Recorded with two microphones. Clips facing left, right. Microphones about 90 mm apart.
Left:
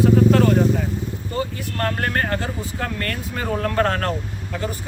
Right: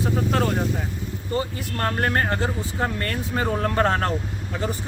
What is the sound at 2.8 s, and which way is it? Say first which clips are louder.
Speech: right 2 dB; 25° right (ahead or behind).